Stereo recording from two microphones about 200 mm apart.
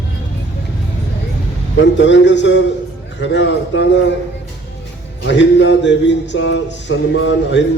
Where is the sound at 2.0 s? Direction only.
65° left (ahead or behind).